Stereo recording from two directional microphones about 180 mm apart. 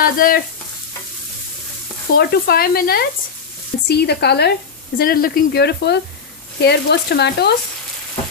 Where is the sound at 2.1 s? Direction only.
60° left (ahead or behind).